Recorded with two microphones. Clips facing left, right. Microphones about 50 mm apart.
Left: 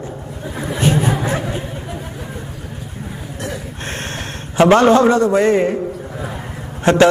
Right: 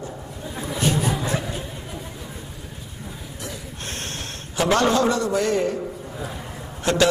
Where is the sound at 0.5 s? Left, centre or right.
Left.